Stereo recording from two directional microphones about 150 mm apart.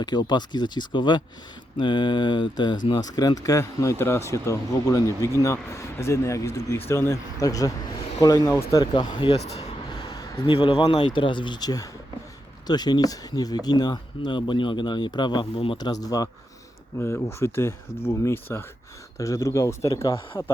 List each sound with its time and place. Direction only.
0.0 s speech: 30° left (ahead or behind)
9.3 s speech: 45° left (ahead or behind)
10.0 s speech: 30° left (ahead or behind)